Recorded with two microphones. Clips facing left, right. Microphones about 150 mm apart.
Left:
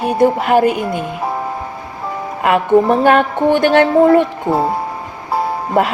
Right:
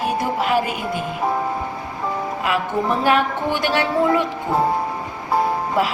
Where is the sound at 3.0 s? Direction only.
50° left (ahead or behind).